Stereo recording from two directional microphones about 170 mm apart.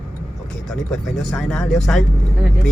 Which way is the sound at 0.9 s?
Centre (ahead or behind).